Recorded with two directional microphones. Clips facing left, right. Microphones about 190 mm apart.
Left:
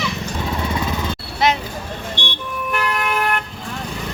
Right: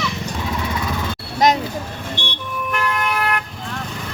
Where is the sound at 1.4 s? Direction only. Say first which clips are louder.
Right 2 dB; 40° right (ahead or behind).